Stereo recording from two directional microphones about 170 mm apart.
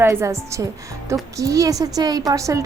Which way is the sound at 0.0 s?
15° right (ahead or behind).